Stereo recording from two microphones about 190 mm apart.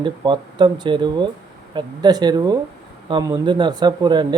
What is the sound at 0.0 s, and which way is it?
Speech, 25° right (ahead or behind).